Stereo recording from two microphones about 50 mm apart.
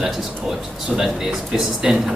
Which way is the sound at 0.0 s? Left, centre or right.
Centre.